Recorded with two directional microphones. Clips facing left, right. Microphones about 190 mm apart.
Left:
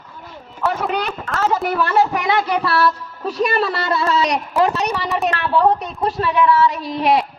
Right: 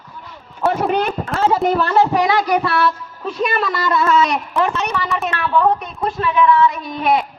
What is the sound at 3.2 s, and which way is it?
Speech, 35° left (ahead or behind).